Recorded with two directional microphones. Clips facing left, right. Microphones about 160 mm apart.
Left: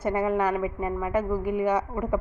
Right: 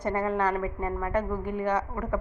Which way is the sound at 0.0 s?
10° left (ahead or behind).